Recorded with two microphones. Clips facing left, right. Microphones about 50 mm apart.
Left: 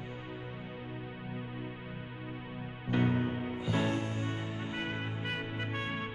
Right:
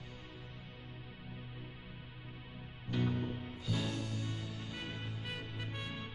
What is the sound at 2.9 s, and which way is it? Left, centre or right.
Music, left.